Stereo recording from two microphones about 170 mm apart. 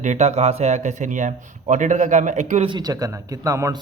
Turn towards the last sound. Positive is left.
turn(degrees=-20)  # may be behind; listen again after turning